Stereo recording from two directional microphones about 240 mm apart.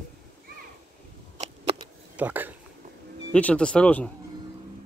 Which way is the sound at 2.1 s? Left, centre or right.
Centre.